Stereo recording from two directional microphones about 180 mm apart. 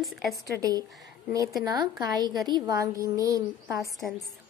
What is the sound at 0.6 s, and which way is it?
A woman's voice, 20° right (ahead or behind).